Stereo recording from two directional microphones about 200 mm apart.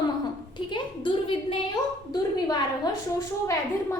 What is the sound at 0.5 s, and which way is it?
A woman's voice, 25° left (ahead or behind).